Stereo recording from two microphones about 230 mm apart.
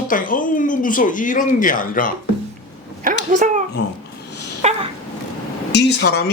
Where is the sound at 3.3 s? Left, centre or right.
Right.